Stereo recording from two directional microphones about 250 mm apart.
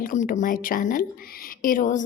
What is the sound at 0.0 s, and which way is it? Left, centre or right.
A woman's voice, left.